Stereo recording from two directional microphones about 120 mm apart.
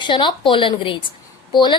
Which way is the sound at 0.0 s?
40° left (ahead or behind).